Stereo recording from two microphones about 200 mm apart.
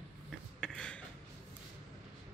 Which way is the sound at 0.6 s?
5° left (ahead or behind).